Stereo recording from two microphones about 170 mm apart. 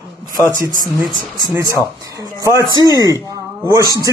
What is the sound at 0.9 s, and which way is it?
A man's voice, 25° right (ahead or behind).